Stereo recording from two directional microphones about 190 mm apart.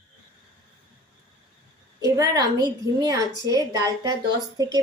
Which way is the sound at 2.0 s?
20° right (ahead or behind).